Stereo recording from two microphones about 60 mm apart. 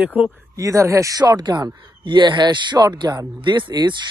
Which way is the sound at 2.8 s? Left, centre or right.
Right.